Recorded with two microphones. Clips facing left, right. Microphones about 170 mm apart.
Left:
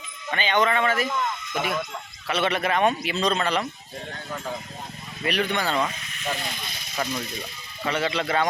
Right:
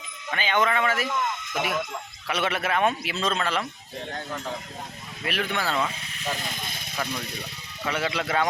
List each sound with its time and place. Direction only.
0.3 s speech: 5° right (ahead or behind)
5.2 s speech: centre (ahead or behind)
6.5 s snake: 50° right (ahead or behind)
7.1 s speech: 65° right (ahead or behind)
7.9 s speech: 5° right (ahead or behind)